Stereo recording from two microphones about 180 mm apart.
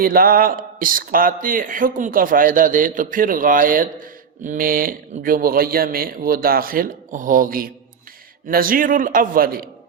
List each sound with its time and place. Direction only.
0.0 s speech: 55° right (ahead or behind)